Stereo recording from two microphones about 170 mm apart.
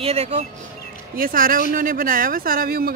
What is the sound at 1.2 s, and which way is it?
Speech, 55° right (ahead or behind).